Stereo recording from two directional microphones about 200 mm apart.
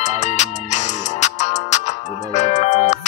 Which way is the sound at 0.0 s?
35° left (ahead or behind).